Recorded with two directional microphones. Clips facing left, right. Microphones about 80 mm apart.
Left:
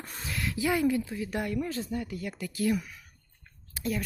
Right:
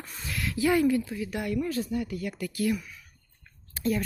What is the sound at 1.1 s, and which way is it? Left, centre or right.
Speech, left.